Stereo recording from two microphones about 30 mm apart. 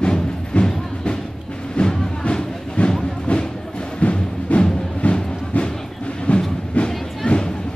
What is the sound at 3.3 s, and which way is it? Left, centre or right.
Music, left.